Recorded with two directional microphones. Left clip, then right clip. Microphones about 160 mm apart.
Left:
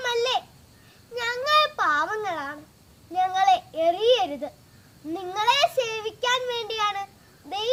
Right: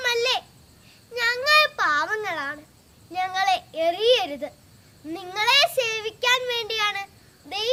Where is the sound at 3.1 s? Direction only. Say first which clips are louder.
Left 3 dB; 5° right (ahead or behind).